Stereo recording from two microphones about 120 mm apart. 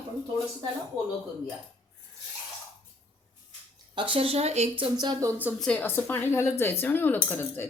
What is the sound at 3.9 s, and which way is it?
Speech, 45° right (ahead or behind).